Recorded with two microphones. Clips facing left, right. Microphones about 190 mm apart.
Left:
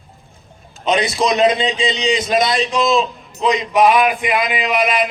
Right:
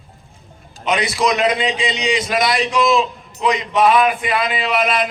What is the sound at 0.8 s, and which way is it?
A man's voice, 20° left (ahead or behind).